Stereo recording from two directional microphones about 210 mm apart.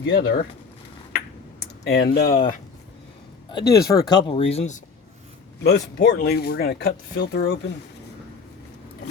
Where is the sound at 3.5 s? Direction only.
20° left (ahead or behind).